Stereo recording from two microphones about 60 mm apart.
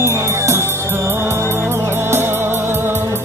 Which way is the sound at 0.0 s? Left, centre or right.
Right.